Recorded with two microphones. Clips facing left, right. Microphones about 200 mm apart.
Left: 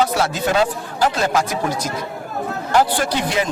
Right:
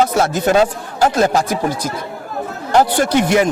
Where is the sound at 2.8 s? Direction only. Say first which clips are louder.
Right 5 dB; 50° right (ahead or behind).